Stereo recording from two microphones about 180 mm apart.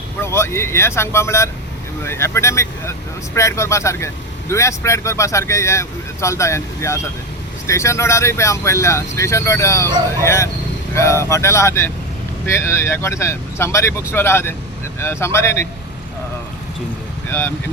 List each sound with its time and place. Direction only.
0.2 s speech: 15° left (ahead or behind)
17.2 s speech: 10° left (ahead or behind)